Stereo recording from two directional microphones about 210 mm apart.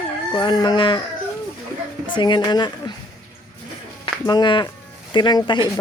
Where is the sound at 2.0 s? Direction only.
20° left (ahead or behind).